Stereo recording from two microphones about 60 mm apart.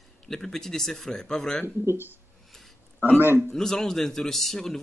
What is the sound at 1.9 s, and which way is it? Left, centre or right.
Speech, right.